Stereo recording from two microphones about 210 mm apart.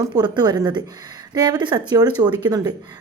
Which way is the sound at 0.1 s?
20° right (ahead or behind).